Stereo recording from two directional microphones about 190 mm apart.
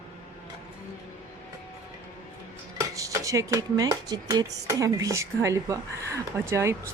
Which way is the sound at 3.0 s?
15° right (ahead or behind).